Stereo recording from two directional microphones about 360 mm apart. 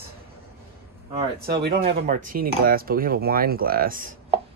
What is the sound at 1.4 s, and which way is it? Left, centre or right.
Speech, right.